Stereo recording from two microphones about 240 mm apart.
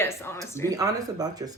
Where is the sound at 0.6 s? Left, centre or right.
Centre.